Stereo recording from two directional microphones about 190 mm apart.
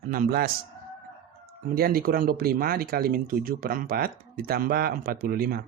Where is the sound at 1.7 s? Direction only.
50° right (ahead or behind).